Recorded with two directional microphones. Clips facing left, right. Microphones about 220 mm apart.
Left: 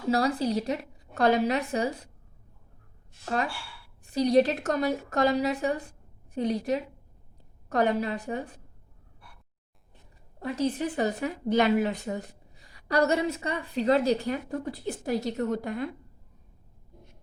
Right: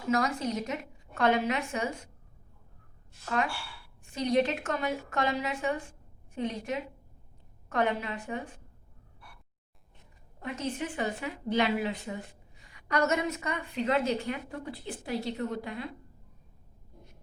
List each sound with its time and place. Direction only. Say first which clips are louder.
0.1 s a woman's voice: left 4 dB; 35° left (ahead or behind)
3.2 s a woman's voice: left 1 dB; 35° left (ahead or behind)
10.4 s a woman's voice: left 6 dB; 35° left (ahead or behind)